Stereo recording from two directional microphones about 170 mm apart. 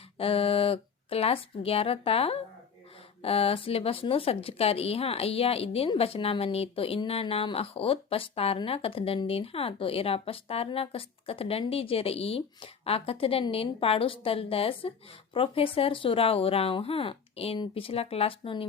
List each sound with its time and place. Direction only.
0.2 s speech: 35° left (ahead or behind)